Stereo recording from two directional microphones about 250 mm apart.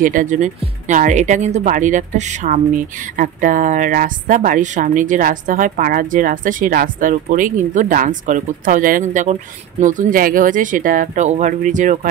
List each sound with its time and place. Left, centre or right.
0.0 s speech: right